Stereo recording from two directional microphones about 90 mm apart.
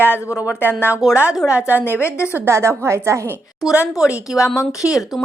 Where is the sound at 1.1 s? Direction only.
20° right (ahead or behind).